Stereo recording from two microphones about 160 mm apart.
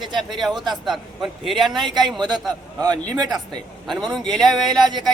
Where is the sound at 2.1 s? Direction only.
25° right (ahead or behind).